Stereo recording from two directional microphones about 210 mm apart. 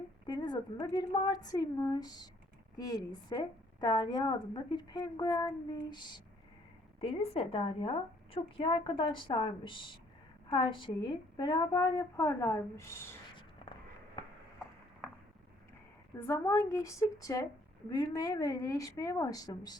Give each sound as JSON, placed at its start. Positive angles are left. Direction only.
{"t": 0.3, "sound": "a woman's voice", "side_deg": 20}
{"t": 16.1, "sound": "a woman's voice", "side_deg": 15}